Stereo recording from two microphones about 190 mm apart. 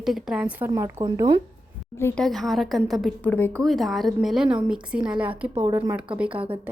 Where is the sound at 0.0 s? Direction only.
Centre (ahead or behind); by 1.4 s 20° right (ahead or behind).